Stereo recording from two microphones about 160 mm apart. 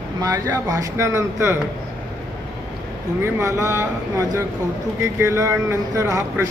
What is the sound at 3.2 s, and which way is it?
Speech, 15° right (ahead or behind).